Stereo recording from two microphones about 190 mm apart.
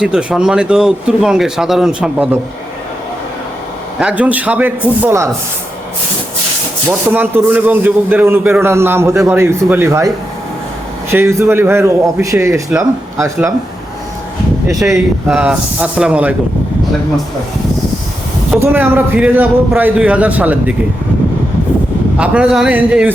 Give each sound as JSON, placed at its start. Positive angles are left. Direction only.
{"t": 0.0, "sound": "speech", "side_deg": -5}
{"t": 4.0, "sound": "a man's voice", "side_deg": -10}
{"t": 7.1, "sound": "a man's voice", "side_deg": -10}
{"t": 11.1, "sound": "a man's voice", "side_deg": -15}
{"t": 15.3, "sound": "speech", "side_deg": -5}
{"t": 18.6, "sound": "a man's voice", "side_deg": -10}
{"t": 22.2, "sound": "a man's voice", "side_deg": -5}